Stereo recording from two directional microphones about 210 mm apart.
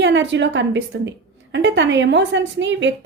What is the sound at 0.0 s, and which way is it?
Speech, 60° right (ahead or behind).